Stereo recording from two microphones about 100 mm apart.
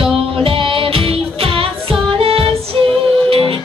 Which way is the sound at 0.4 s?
65° right (ahead or behind).